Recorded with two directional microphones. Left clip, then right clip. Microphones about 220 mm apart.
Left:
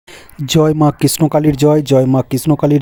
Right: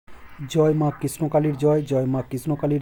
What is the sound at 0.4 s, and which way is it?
Speech, 45° left (ahead or behind).